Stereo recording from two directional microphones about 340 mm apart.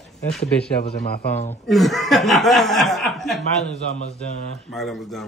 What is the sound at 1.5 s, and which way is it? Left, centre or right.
Speech, centre.